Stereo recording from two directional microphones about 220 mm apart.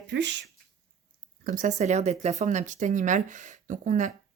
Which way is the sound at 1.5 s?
35° right (ahead or behind).